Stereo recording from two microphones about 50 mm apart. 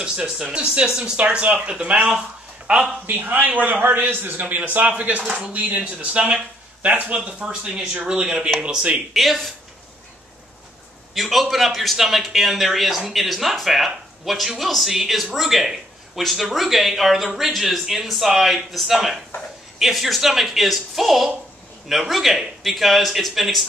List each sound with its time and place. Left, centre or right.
0.0 s speech: centre
3.1 s a man's voice: right
5.2 s speech: centre
5.5 s a man's voice: right
5.8 s speech: right
9.1 s a man's voice: centre
11.1 s a man's voice: centre